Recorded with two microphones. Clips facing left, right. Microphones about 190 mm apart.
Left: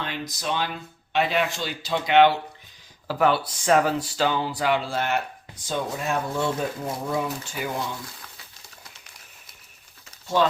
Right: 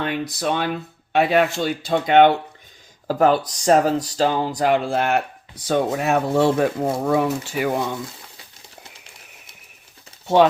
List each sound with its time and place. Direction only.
0.0 s speech: 60° right (ahead or behind)
5.6 s speech: 70° right (ahead or behind)
10.2 s speech: 65° right (ahead or behind)